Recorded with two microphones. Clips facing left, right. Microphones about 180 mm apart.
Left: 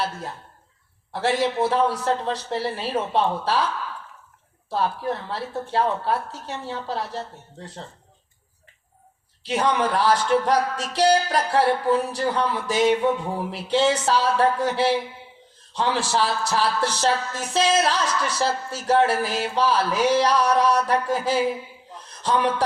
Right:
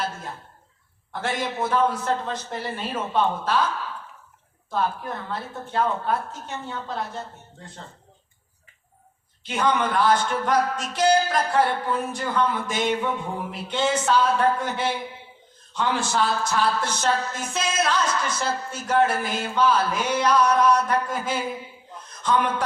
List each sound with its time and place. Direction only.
1.1 s a woman's voice: 35° left (ahead or behind)
4.7 s a woman's voice: 35° left (ahead or behind)
9.4 s a woman's voice: 35° left (ahead or behind)
21.9 s a sound: 35° left (ahead or behind)